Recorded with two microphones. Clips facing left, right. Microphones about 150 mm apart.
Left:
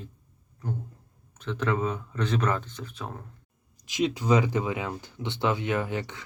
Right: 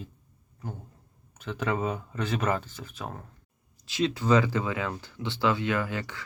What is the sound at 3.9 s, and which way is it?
Speech, 15° left (ahead or behind).